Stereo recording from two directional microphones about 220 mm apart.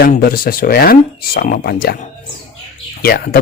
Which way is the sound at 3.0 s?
45° left (ahead or behind).